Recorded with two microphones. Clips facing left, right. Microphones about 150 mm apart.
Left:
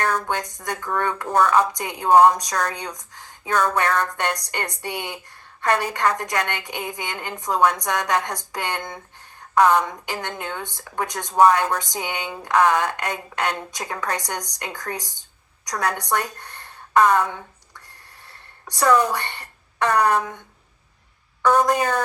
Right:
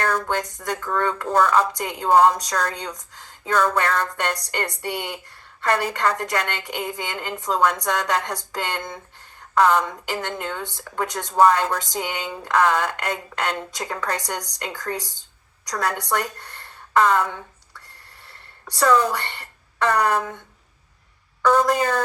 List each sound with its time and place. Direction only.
0.1 s a woman's voice: 20° left (ahead or behind)
21.5 s speech: 15° left (ahead or behind)